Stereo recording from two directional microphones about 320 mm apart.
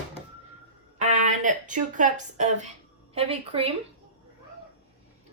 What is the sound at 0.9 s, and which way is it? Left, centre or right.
A woman's voice, right.